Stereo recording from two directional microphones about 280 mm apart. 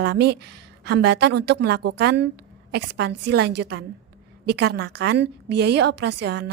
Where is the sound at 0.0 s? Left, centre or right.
Right.